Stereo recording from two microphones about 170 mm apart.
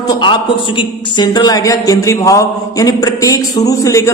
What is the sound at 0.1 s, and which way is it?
A man's voice, 25° left (ahead or behind).